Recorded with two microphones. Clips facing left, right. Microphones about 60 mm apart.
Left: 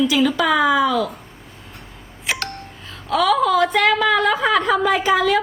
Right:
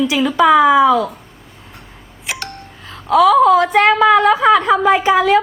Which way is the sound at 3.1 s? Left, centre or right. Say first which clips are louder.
Right 7 dB; right.